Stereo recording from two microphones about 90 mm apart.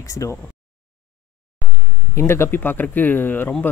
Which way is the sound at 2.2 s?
30° left (ahead or behind).